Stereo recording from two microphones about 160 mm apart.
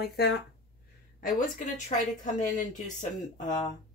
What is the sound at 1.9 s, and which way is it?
Speech, 50° left (ahead or behind).